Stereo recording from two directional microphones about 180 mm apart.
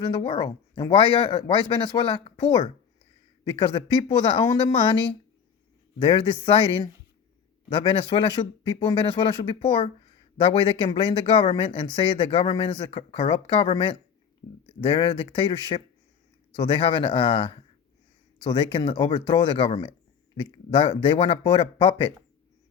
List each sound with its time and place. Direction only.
0.0 s speech: 25° left (ahead or behind)
6.1 s speech: 30° left (ahead or behind)